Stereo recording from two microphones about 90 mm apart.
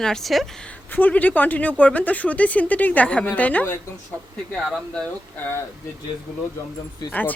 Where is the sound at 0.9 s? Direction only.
20° left (ahead or behind).